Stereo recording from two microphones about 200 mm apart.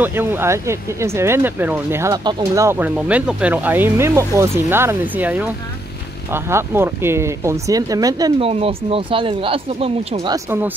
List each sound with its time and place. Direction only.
0.0 s speech: 10° right (ahead or behind)
8.5 s speech: 30° right (ahead or behind)